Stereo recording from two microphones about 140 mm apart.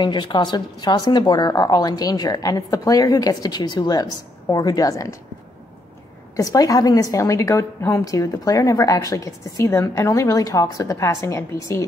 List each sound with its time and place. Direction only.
0.0 s a woman's voice: 35° left (ahead or behind)
6.3 s a woman's voice: 25° left (ahead or behind)